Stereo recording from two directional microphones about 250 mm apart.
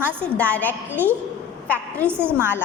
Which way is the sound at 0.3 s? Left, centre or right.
Centre.